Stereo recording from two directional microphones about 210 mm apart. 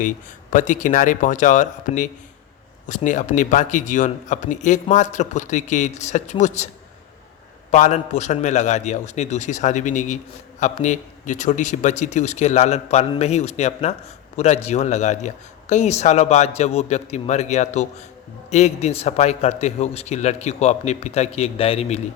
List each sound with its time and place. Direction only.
0.5 s a man's voice: 35° left (ahead or behind)
7.7 s a man's voice: 35° left (ahead or behind)